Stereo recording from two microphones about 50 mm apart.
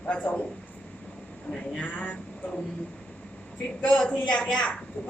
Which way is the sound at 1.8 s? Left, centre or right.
Left.